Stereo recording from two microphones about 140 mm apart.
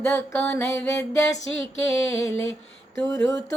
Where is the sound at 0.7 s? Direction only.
20° left (ahead or behind).